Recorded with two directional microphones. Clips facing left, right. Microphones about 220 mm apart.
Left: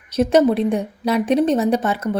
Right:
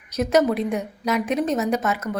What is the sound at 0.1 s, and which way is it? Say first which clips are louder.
A woman's voice: left 4 dB; 30° left (ahead or behind).